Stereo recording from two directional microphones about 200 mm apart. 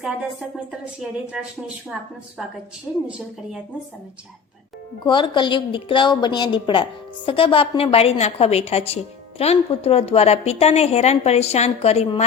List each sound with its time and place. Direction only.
0.0 s speech: 5° right (ahead or behind)
3.1 s speech: 5° right (ahead or behind)
5.0 s a woman's voice: 25° left (ahead or behind)